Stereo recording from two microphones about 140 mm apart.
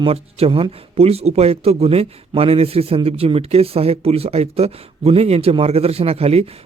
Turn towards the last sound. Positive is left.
turn(degrees=-45)  # may be behind; listen again after turning